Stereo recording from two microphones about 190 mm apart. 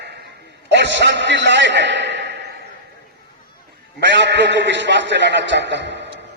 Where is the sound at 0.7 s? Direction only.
70° right (ahead or behind).